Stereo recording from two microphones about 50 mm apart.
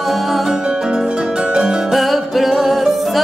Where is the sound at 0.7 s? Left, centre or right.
Centre.